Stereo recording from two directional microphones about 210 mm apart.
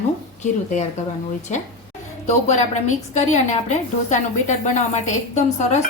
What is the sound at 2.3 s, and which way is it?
A woman's voice, 35° left (ahead or behind).